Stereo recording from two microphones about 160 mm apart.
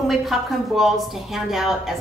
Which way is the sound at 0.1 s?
Centre (ahead or behind).